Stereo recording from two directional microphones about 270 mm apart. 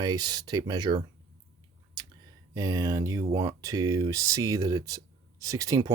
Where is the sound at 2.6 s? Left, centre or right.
Centre.